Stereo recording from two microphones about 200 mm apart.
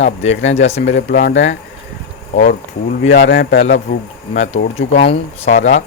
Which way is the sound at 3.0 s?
65° left (ahead or behind).